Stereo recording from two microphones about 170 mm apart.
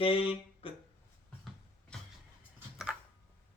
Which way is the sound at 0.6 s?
30° left (ahead or behind).